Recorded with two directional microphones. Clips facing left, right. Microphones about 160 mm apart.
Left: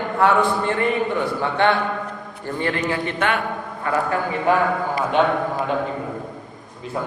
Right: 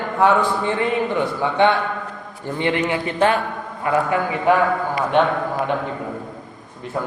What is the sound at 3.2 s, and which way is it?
Speech, 30° right (ahead or behind).